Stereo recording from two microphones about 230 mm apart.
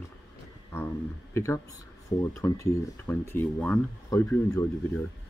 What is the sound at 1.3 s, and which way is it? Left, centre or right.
Speech, centre.